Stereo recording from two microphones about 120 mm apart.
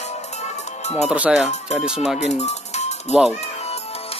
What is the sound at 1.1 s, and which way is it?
Speech, 5° right (ahead or behind).